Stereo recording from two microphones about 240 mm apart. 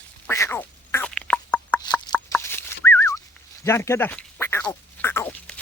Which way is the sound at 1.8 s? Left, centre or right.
Centre.